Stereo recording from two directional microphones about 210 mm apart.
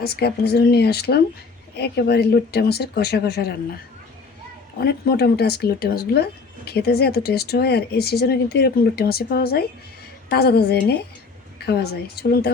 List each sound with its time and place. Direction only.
0.0 s speech: 50° left (ahead or behind)
4.8 s speech: 50° left (ahead or behind)